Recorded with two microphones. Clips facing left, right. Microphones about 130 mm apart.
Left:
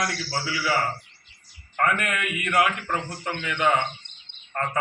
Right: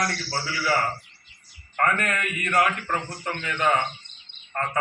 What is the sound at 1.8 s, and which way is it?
Speech, 10° left (ahead or behind).